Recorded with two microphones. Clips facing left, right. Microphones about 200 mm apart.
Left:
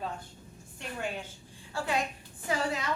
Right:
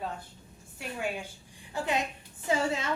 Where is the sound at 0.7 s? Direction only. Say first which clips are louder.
Right 2 dB; 10° right (ahead or behind); by 2.9 s 25° right (ahead or behind).